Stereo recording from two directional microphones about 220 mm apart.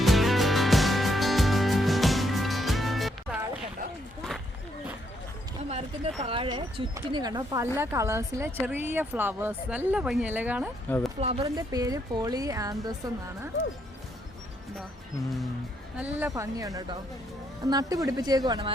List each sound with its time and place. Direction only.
0.0 s music: centre (ahead or behind)
6.2 s speech: 25° right (ahead or behind); by 10.7 s 5° right (ahead or behind)
10.8 s speech: 5° left (ahead or behind)
11.2 s speech: 30° right (ahead or behind)
11.4 s speech: 15° right (ahead or behind)
16.0 s speech: 10° right (ahead or behind)